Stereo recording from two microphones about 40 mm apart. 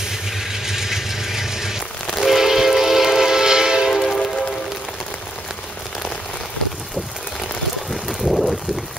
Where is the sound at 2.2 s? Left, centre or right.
Centre.